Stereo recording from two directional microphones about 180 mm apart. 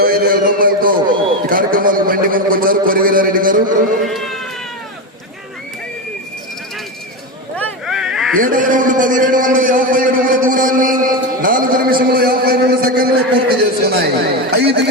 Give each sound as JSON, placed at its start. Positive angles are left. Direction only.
{"t": 0.0, "sound": "music", "side_deg": -55}
{"t": 1.5, "sound": "a man's voice", "side_deg": -50}
{"t": 4.0, "sound": "cat", "side_deg": 0}
{"t": 7.5, "sound": "a sound", "side_deg": 5}
{"t": 8.4, "sound": "a man's voice", "side_deg": -50}
{"t": 11.3, "sound": "a sound", "side_deg": -50}